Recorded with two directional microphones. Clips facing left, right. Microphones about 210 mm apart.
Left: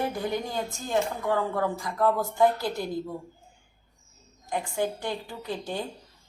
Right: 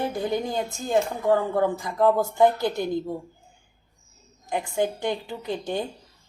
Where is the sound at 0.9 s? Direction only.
25° right (ahead or behind).